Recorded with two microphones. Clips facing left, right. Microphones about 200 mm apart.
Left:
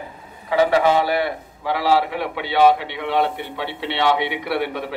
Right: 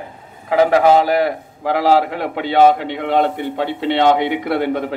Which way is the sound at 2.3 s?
45° right (ahead or behind).